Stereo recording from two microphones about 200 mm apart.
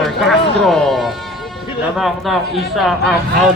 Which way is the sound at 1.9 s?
Centre (ahead or behind).